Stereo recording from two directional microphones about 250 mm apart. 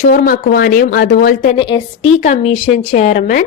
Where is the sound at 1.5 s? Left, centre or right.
Centre.